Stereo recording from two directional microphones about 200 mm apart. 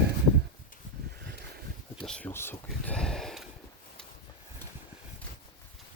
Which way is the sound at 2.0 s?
5° left (ahead or behind).